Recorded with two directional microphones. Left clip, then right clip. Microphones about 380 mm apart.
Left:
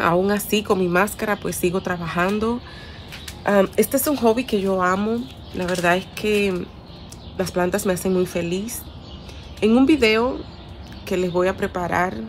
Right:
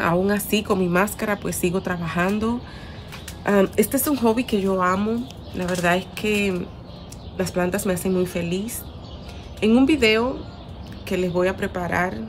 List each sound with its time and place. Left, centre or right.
0.0 s a woman's voice: centre